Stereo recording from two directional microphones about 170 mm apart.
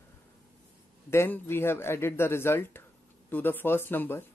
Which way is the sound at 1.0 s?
10° left (ahead or behind).